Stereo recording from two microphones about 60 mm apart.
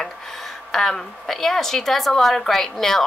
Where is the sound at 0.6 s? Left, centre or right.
Centre.